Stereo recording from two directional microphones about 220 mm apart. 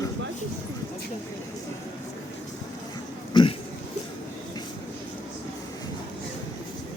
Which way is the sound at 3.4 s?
20° left (ahead or behind).